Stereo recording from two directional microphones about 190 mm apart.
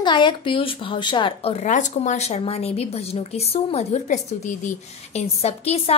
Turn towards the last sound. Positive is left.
turn(degrees=35)  # may be behind; listen again after turning